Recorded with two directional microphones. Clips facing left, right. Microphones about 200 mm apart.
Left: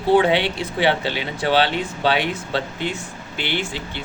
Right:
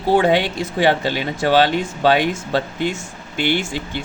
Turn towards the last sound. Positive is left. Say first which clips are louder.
# right 5 dB
turn(degrees=-45)  # may be behind; listen again after turning